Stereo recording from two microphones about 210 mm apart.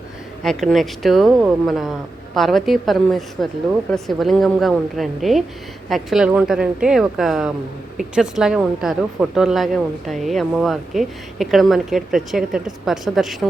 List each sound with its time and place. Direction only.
0.4 s a woman's voice: centre (ahead or behind)